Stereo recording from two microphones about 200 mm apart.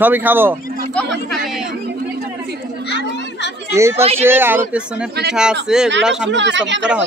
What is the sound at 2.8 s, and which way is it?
Children playing, 60° left (ahead or behind).